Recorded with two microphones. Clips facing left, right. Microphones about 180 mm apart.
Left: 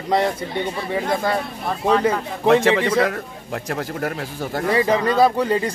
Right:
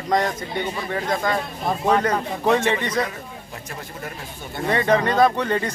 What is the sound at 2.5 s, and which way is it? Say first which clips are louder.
A man's voice: left 5 dB; 90° left.